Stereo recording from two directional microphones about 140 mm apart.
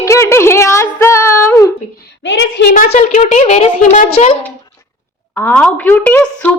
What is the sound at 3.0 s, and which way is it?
A woman's voice, 65° left (ahead or behind).